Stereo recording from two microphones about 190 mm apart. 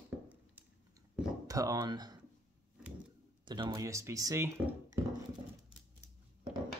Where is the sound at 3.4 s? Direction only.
20° right (ahead or behind).